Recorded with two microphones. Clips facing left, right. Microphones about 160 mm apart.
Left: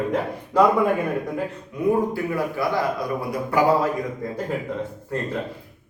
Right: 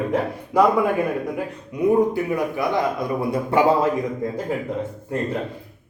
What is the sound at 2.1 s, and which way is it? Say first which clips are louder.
A man's voice: right 2 dB; 20° right (ahead or behind).